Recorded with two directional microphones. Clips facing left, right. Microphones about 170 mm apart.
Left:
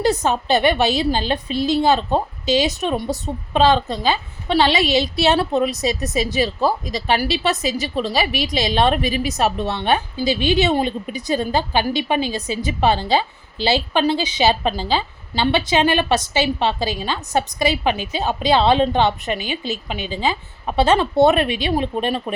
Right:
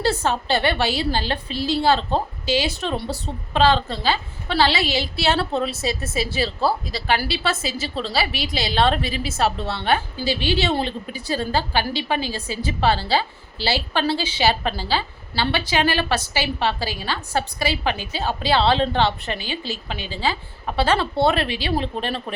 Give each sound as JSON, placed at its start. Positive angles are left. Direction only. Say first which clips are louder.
{"t": 0.0, "sound": "a woman's voice", "louder": "left 3 dB", "side_deg": 15}